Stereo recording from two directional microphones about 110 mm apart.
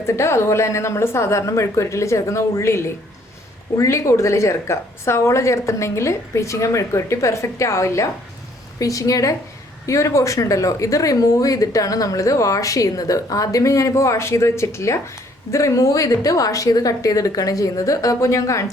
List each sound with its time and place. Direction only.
0.0 s a woman's voice: 25° left (ahead or behind)